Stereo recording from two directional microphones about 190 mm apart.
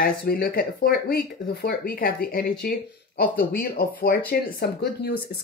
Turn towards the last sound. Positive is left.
turn(degrees=55)  # may be behind; listen again after turning